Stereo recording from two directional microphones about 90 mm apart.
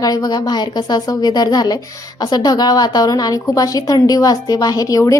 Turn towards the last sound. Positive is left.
turn(degrees=35)  # may be behind; listen again after turning